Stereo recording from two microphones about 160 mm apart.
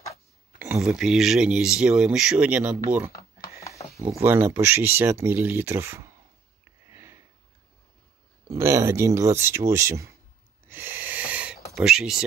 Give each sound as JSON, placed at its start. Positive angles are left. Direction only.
{"t": 0.6, "sound": "speech", "side_deg": -10}
{"t": 4.2, "sound": "speech", "side_deg": -15}
{"t": 6.9, "sound": "sniff", "side_deg": -15}
{"t": 8.5, "sound": "speech", "side_deg": -20}
{"t": 10.7, "sound": "a sound", "side_deg": -15}
{"t": 11.7, "sound": "speech", "side_deg": -5}